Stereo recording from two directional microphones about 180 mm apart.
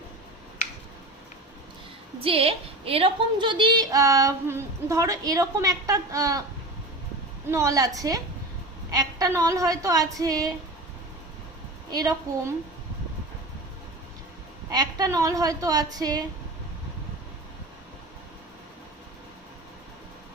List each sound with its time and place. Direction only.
2.2 s a woman's voice: 30° right (ahead or behind)
7.5 s a woman's voice: 15° right (ahead or behind)
11.9 s a woman's voice: 20° right (ahead or behind)
14.7 s a woman's voice: 20° right (ahead or behind)